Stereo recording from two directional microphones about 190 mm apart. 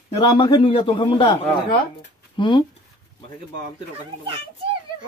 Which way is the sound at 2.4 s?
25° left (ahead or behind).